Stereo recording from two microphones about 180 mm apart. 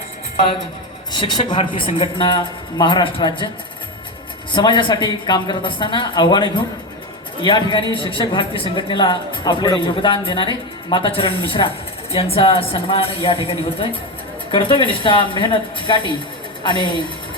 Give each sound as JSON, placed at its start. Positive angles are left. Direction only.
{"t": 1.1, "sound": "a man's voice", "side_deg": 25}
{"t": 4.5, "sound": "a man's voice", "side_deg": 25}